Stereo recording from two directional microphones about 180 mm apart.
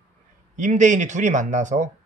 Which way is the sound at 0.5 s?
45° right (ahead or behind).